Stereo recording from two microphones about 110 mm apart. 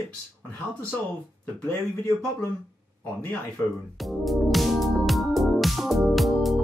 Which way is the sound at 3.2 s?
15° left (ahead or behind).